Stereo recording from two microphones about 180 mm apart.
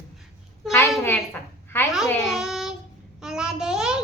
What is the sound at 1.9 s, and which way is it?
Babbling, centre (ahead or behind).